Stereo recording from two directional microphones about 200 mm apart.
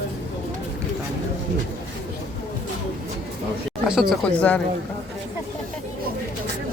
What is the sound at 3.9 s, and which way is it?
Speech, centre (ahead or behind).